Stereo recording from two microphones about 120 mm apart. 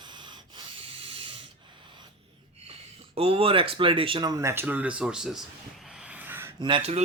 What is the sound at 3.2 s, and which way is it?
Speech, 55° right (ahead or behind).